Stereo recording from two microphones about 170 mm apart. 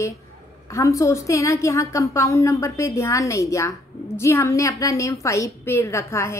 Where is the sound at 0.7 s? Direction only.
20° left (ahead or behind).